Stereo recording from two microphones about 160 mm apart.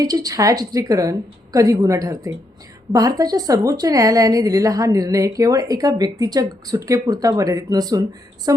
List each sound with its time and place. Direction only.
0.0 s a woman's voice: 25° right (ahead or behind)